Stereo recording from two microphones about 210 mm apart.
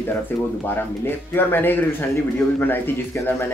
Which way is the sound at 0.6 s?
10° left (ahead or behind).